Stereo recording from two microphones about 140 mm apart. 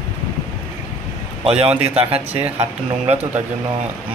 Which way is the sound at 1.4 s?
45° right (ahead or behind).